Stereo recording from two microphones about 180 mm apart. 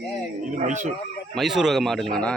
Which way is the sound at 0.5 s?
40° right (ahead or behind).